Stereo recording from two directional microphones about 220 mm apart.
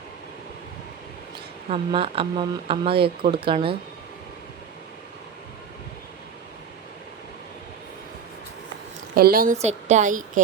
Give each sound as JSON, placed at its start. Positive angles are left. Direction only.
{"t": 1.7, "sound": "speech", "side_deg": -25}
{"t": 9.1, "sound": "a woman's voice", "side_deg": -40}